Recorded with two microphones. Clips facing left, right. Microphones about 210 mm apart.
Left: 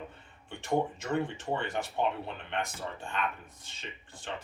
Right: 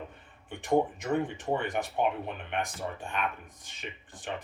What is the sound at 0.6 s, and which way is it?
Speech, 15° right (ahead or behind).